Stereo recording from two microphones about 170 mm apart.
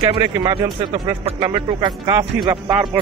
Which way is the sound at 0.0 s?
25° right (ahead or behind).